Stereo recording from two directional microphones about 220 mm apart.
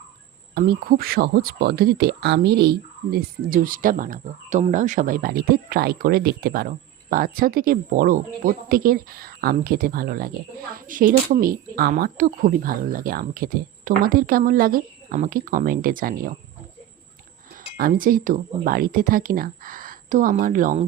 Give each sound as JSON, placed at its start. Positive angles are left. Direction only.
{"t": 0.5, "sound": "speech", "side_deg": -45}
{"t": 17.7, "sound": "speech", "side_deg": -40}